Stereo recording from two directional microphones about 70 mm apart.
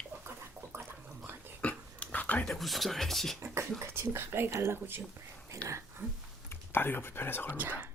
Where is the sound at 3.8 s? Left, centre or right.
Right.